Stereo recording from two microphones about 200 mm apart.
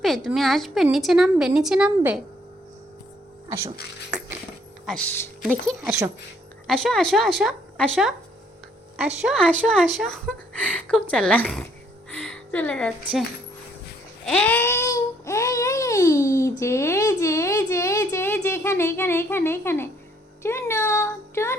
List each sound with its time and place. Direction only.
0.0 s a woman's voice: centre (ahead or behind)
4.9 s speech: 5° left (ahead or behind)
5.8 s a woman's voice: 15° right (ahead or behind)
6.7 s a woman's voice: centre (ahead or behind)
9.2 s a woman's voice: centre (ahead or behind)
12.1 s a sound: 5° left (ahead or behind)
14.3 s a sound: 5° left (ahead or behind)
20.4 s speech: 15° left (ahead or behind)